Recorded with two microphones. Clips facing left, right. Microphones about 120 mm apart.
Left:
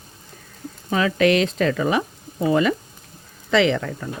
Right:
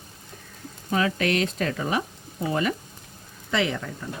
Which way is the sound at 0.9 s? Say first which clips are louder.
Left 6 dB; 90° left.